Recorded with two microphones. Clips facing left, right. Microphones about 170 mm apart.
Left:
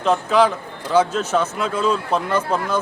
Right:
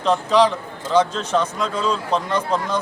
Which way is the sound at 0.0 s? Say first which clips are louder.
Even; 5° left (ahead or behind).